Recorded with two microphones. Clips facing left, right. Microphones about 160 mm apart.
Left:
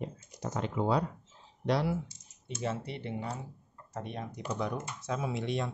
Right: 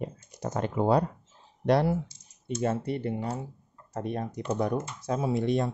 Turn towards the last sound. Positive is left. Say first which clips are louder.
# right 7 dB
turn(degrees=-45)  # may be behind; listen again after turning